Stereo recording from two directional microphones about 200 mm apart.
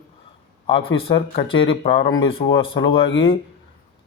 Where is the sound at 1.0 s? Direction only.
25° left (ahead or behind).